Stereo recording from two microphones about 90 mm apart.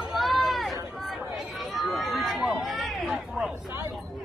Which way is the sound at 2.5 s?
Centre (ahead or behind).